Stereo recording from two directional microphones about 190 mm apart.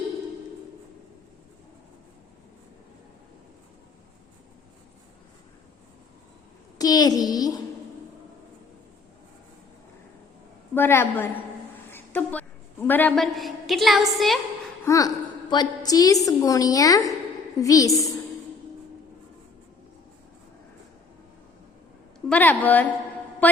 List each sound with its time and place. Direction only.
6.7 s a woman's voice: 20° left (ahead or behind)
10.8 s a woman's voice: 10° left (ahead or behind)
14.8 s a woman's voice: 20° left (ahead or behind)
22.3 s a woman's voice: 10° left (ahead or behind)
23.4 s mantra: 10° left (ahead or behind)